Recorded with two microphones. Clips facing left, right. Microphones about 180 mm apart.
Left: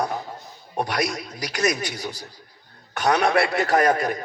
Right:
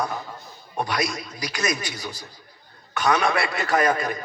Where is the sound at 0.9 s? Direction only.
70° left (ahead or behind).